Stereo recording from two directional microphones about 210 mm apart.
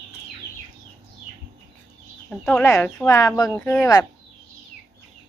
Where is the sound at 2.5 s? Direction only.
5° left (ahead or behind).